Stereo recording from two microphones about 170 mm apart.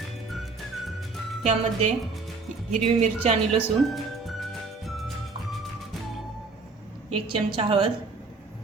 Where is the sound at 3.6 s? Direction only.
Centre (ahead or behind).